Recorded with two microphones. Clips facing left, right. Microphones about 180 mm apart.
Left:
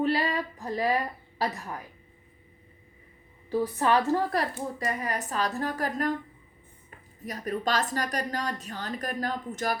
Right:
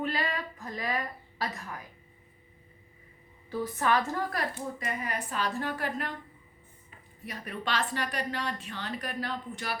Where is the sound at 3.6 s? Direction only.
35° left (ahead or behind).